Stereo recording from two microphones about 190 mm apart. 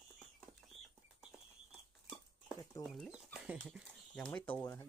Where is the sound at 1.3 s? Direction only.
5° right (ahead or behind).